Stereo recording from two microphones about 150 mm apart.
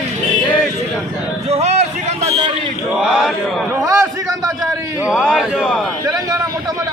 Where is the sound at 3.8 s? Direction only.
20° right (ahead or behind).